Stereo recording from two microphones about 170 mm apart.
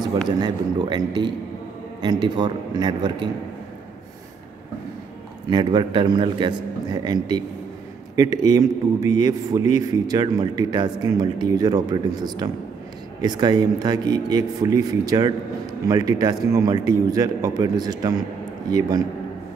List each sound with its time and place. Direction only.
0.4 s a man's voice: 25° right (ahead or behind)
5.5 s a man's voice: 25° right (ahead or behind)